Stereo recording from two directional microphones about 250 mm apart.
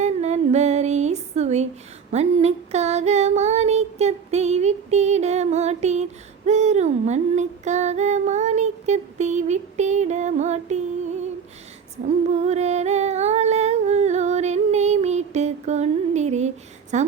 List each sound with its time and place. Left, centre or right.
0.0 s music: right
2.1 s child singing: right
12.0 s a sound: right
16.9 s a woman's voice: right